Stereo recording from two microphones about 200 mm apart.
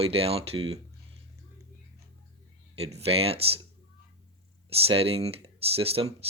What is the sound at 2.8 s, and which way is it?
Speech, 30° right (ahead or behind).